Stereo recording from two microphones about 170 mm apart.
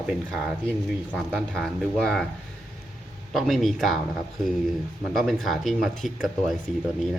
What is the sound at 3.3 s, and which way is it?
Speech, centre (ahead or behind).